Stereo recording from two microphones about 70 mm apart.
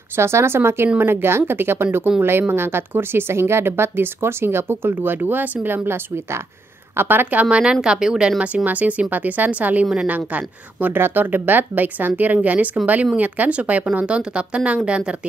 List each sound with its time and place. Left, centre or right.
0.1 s speech: right
5.9 s speech: right; by 8.6 s centre
8.6 s speech: right